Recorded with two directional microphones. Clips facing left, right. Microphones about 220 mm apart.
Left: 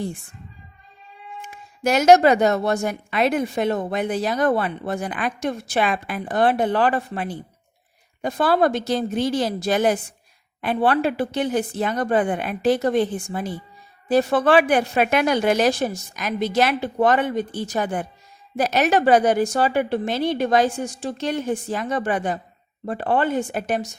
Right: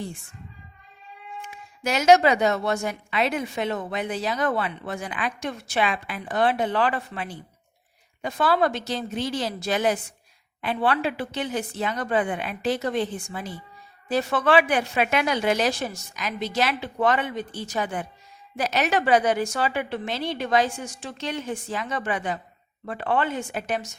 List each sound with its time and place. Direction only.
1.4 s a woman's voice: 50° left (ahead or behind)